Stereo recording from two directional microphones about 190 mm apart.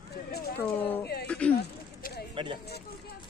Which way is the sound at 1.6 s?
60° left (ahead or behind).